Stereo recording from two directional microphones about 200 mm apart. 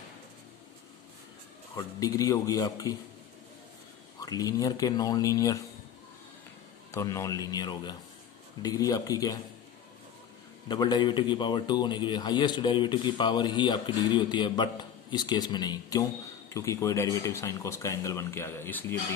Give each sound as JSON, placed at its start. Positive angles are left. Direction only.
{"t": 1.8, "sound": "speech", "side_deg": 15}
{"t": 4.2, "sound": "speech", "side_deg": 20}
{"t": 6.9, "sound": "speech", "side_deg": 15}
{"t": 10.7, "sound": "a man's voice", "side_deg": 20}